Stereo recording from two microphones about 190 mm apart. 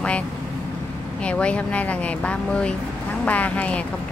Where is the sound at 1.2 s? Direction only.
5° left (ahead or behind).